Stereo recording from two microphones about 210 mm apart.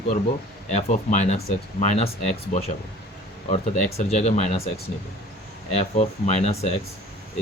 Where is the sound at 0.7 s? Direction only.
35° left (ahead or behind).